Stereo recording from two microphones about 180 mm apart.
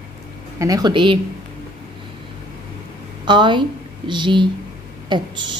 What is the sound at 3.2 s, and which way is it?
A woman's voice, 25° right (ahead or behind).